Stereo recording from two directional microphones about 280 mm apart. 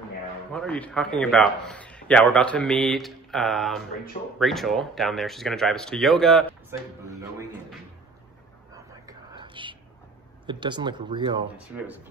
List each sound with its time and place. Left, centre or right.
0.5 s a man's voice: centre
7.2 s music: centre
8.7 s whispering: centre
10.4 s speech: centre
11.5 s a man's voice: centre